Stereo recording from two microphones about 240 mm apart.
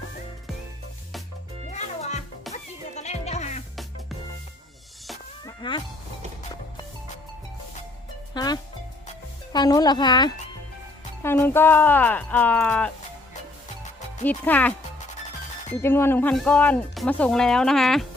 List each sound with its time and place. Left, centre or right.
1.7 s music: left
5.5 s cat: centre
8.3 s music: centre
9.5 s speech: centre
14.3 s speech: centre
15.8 s speech: centre